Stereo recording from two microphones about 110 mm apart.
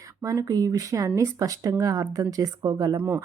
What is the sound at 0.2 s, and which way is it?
Speech, 30° right (ahead or behind).